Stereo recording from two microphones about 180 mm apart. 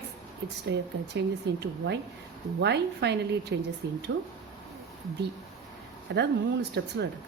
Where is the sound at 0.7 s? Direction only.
80° right.